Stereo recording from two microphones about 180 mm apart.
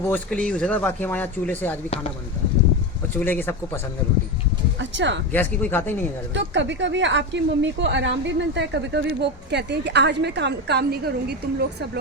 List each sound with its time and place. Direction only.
0.1 s speech: 5° left (ahead or behind)
3.2 s speech: 10° left (ahead or behind)
4.8 s speech: 85° right
5.3 s speech: 10° left (ahead or behind)
6.3 s a woman's voice: 85° right; by 11.7 s 60° right (ahead or behind)